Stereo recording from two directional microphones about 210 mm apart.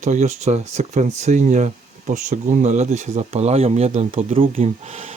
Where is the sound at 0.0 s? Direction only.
35° right (ahead or behind).